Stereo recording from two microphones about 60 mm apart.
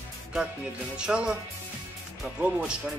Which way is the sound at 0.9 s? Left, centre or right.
Centre.